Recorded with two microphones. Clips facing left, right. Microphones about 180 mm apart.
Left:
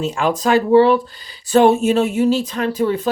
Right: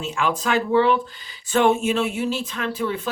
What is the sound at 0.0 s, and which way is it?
Speech, 40° left (ahead or behind).